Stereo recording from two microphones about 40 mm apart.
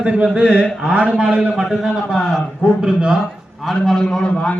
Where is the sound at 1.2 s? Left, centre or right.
Centre.